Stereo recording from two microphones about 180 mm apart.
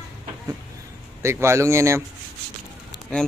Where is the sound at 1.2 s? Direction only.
15° right (ahead or behind).